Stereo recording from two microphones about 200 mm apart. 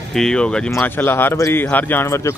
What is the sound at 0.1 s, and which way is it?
Speech, 5° left (ahead or behind).